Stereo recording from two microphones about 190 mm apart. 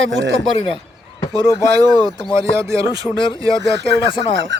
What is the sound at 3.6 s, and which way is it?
Speech, 65° right (ahead or behind).